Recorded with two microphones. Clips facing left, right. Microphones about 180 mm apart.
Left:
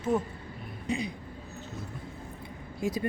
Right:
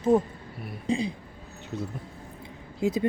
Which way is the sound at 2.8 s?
20° right (ahead or behind).